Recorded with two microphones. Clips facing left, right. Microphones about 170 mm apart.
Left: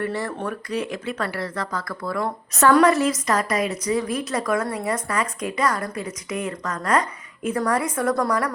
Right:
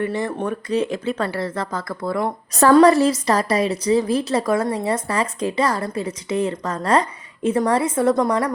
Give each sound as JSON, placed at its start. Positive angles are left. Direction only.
{"t": 0.0, "sound": "a woman's voice", "side_deg": -20}
{"t": 2.6, "sound": "a woman's voice", "side_deg": -35}